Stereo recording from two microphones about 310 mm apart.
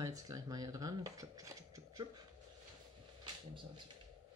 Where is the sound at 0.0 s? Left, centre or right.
Centre.